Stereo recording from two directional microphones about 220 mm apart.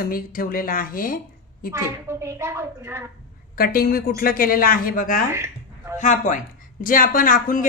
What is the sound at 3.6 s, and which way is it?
Speech, 40° left (ahead or behind).